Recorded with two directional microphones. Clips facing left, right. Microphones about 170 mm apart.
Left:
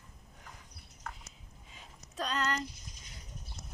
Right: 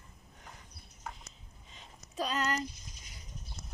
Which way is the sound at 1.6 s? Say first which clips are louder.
Right 1 dB; 5° left (ahead or behind).